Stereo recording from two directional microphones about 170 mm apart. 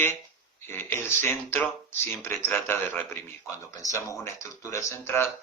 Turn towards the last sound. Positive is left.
turn(degrees=15)  # may be behind; listen again after turning